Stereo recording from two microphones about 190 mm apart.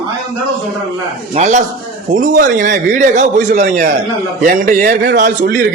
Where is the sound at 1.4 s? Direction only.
40° right (ahead or behind).